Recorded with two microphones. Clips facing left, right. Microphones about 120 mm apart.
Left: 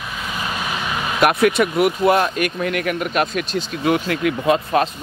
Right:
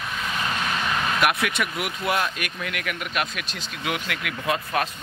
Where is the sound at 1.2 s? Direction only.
40° left (ahead or behind).